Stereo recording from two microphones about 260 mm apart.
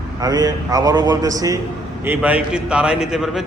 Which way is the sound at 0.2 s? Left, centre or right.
Centre.